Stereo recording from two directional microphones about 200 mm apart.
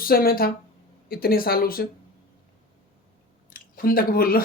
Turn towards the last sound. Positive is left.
turn(degrees=45)  # may be behind; listen again after turning